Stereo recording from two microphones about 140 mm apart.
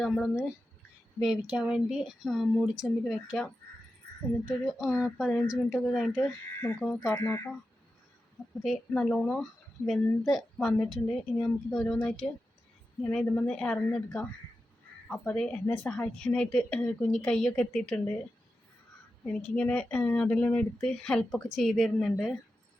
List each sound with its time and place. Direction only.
0.0 s a woman's voice: centre (ahead or behind)
6.6 s speech: 15° left (ahead or behind)
8.9 s a woman's voice: 5° left (ahead or behind)
19.2 s a woman's voice: 10° left (ahead or behind)